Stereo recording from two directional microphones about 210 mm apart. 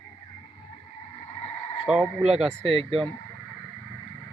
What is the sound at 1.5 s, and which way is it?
Sheep, 25° left (ahead or behind).